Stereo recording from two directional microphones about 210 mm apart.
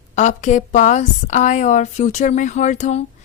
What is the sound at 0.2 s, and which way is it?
A woman's voice, 35° left (ahead or behind).